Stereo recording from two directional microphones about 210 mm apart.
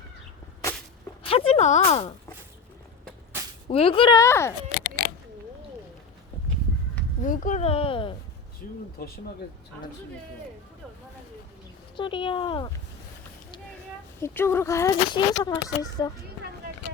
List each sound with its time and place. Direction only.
1.3 s speech: 25° left (ahead or behind)
3.7 s speech: 25° left (ahead or behind)
7.2 s a sound: 40° left (ahead or behind)
8.6 s speech: 45° left (ahead or behind)
11.9 s speech: 25° left (ahead or behind)
14.2 s speech: 10° left (ahead or behind)